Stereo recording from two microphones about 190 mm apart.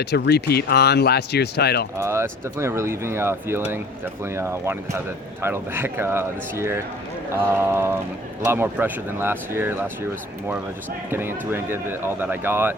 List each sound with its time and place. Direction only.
0.0 s speech: 60° left (ahead or behind)
2.0 s speech: 15° right (ahead or behind)
11.1 s speech: 10° right (ahead or behind)